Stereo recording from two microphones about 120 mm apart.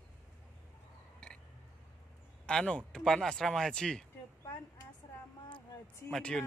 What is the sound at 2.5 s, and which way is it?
Speech, 5° left (ahead or behind).